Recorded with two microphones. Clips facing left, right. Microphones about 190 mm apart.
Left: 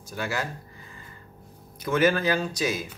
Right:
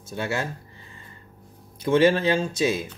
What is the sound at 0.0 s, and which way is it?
Speech, 25° right (ahead or behind).